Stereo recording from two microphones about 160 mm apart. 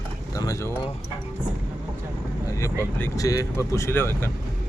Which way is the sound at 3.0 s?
20° left (ahead or behind).